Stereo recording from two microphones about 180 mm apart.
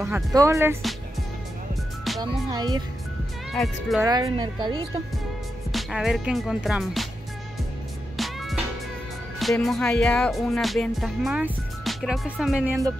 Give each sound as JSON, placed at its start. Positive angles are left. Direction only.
{"t": 0.0, "sound": "speech", "side_deg": -15}
{"t": 2.1, "sound": "music", "side_deg": 0}
{"t": 2.5, "sound": "speech", "side_deg": -25}
{"t": 3.5, "sound": "music", "side_deg": 0}
{"t": 4.0, "sound": "speech", "side_deg": -20}
{"t": 5.7, "sound": "music", "side_deg": 0}
{"t": 8.2, "sound": "music", "side_deg": 0}